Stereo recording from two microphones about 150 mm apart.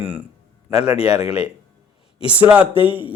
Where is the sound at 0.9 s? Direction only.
40° left (ahead or behind).